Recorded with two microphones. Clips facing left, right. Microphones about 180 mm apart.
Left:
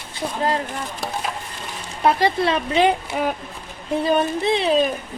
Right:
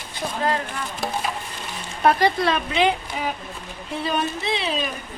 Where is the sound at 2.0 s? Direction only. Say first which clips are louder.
Even; 25° left (ahead or behind).